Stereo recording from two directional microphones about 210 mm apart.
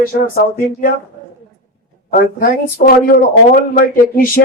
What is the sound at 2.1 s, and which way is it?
Speech, 40° left (ahead or behind).